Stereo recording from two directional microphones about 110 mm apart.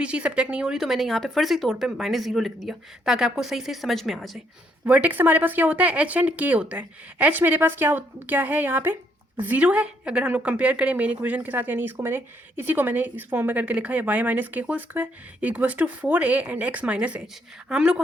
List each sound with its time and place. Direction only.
0.0 s speech: 10° right (ahead or behind)
4.9 s a woman's voice: 15° right (ahead or behind)